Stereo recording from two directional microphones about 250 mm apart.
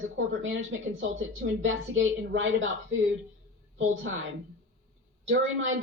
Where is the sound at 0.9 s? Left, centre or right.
Right.